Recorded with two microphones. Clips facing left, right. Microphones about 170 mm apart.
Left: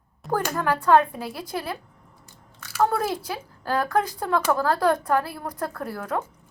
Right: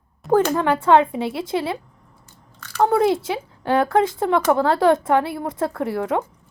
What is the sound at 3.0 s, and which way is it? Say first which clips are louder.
Speech: right 9 dB; 25° right (ahead or behind).